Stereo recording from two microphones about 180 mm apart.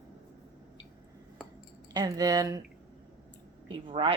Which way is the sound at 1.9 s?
20° right (ahead or behind).